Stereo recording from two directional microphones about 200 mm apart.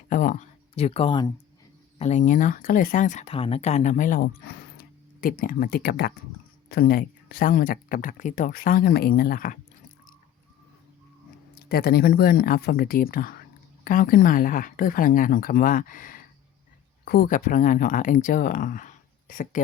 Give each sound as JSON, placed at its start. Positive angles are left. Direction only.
{"t": 0.1, "sound": "speech", "side_deg": 40}
{"t": 2.0, "sound": "speech", "side_deg": 35}
{"t": 11.6, "sound": "speech", "side_deg": 50}